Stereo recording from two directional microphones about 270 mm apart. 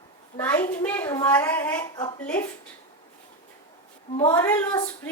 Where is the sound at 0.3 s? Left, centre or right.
Centre.